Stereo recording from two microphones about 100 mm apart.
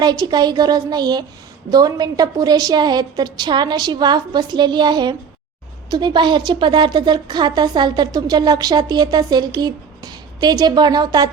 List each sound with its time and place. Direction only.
0.0 s a woman's voice: 45° right (ahead or behind)